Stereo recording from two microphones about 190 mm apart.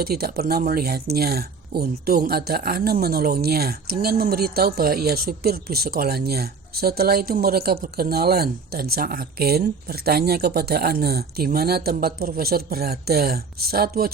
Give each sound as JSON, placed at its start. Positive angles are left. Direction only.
{"t": 0.0, "sound": "speech", "side_deg": -55}